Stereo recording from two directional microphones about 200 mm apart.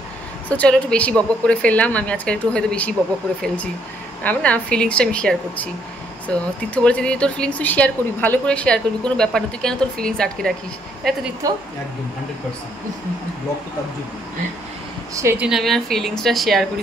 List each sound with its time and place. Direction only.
0.5 s a woman's voice: 5° left (ahead or behind)
11.4 s a woman's voice: 15° right (ahead or behind)
15.1 s speech: 10° right (ahead or behind)